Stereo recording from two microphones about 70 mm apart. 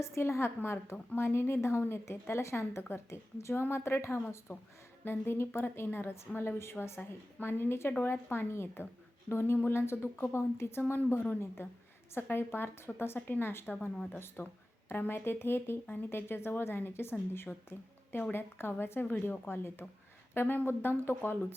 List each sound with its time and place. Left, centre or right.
0.0 s a woman's voice: left